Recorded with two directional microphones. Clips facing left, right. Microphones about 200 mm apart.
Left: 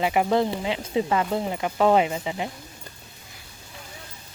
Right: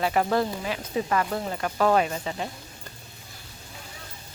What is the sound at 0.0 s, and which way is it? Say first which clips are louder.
Speech: left 2 dB; 15° left (ahead or behind).